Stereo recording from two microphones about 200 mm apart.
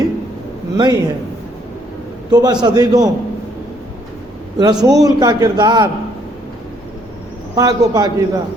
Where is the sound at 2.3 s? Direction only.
20° right (ahead or behind).